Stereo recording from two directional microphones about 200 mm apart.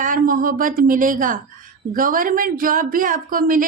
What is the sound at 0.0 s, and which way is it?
A woman's voice, 45° right (ahead or behind).